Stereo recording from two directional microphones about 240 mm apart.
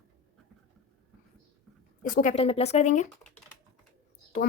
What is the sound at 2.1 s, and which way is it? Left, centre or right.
Speech, left.